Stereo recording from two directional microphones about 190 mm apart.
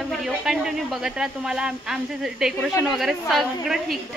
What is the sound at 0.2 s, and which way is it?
A woman's voice, 5° right (ahead or behind).